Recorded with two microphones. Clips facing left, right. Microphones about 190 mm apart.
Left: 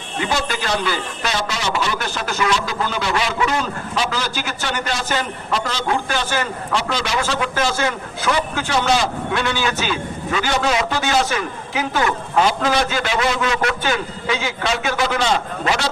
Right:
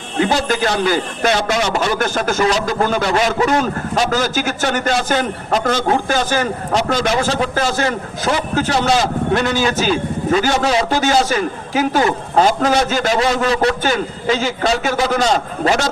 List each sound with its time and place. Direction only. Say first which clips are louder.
0.2 s a man's voice: right 6 dB; 45° right (ahead or behind)